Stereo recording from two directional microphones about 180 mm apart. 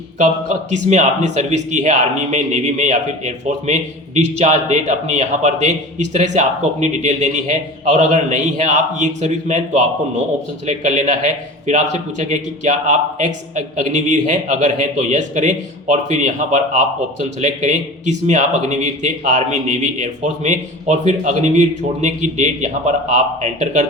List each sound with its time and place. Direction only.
0.2 s a man's voice: 40° right (ahead or behind)